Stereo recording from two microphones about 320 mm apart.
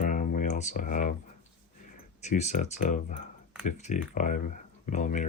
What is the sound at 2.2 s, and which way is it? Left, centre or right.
Speech, left.